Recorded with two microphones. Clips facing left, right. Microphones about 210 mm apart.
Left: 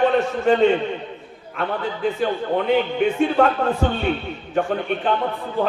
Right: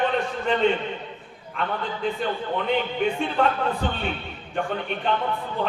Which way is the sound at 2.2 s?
45° left (ahead or behind).